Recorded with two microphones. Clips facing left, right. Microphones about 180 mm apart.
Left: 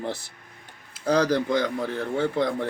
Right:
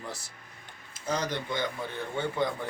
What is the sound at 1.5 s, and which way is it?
A man's voice, 90° left.